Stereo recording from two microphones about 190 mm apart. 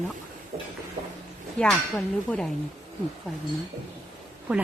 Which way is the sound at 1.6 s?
5° left (ahead or behind).